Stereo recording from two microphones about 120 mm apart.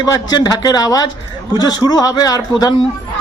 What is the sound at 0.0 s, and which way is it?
A man's voice, 35° left (ahead or behind).